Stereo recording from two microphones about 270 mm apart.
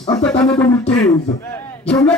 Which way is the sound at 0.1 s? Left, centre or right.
Centre.